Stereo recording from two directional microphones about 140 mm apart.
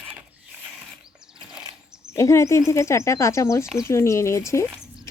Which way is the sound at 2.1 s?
20° left (ahead or behind).